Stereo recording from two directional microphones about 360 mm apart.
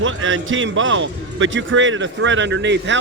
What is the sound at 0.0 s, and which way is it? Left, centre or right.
A man's voice, right.